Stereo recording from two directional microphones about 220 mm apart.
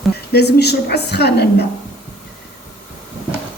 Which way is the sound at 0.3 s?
50° left (ahead or behind).